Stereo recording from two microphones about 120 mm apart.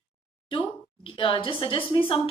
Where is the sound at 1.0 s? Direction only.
45° left (ahead or behind).